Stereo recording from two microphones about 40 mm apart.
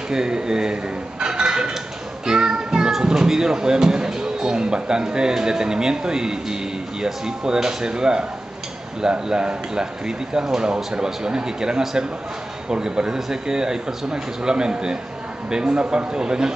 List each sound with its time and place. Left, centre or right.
0.1 s speech: centre
2.2 s music: centre
3.0 s a man's voice: centre